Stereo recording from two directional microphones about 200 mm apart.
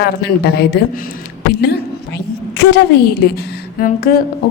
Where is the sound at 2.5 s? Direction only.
55° left (ahead or behind).